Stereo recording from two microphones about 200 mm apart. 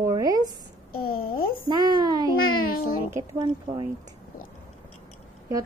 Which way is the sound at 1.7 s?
20° right (ahead or behind).